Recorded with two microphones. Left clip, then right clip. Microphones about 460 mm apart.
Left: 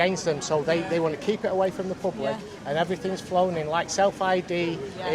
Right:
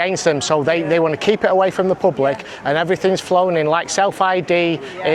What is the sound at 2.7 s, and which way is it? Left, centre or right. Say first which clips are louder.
Speech: right 10 dB; right.